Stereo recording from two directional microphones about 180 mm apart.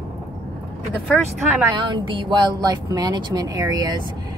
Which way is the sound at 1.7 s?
25° right (ahead or behind).